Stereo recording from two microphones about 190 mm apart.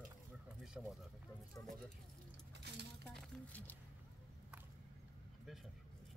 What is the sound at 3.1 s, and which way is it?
Speech, 5° left (ahead or behind).